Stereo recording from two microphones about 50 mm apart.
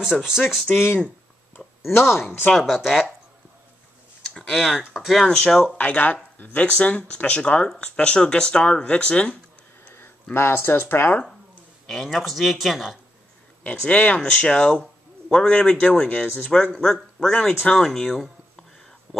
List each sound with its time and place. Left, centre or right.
0.0 s speech: centre
1.8 s speech: left
2.5 s speech: centre
4.3 s a sound: centre
4.9 s speech: centre
5.8 s speech: left
6.6 s speech: left
10.3 s speech: left
11.9 s speech: centre
13.7 s a man's voice: left
15.5 s speech: left
16.7 s speech: centre
17.7 s speech: centre